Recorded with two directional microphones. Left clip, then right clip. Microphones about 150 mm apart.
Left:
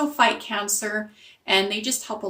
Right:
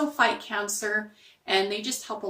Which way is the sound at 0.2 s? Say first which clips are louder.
Left 4 dB; 35° left (ahead or behind).